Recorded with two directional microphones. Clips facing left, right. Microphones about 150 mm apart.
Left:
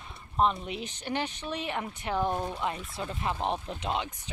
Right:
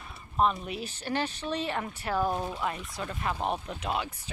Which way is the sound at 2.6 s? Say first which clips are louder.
Even; 25° left (ahead or behind).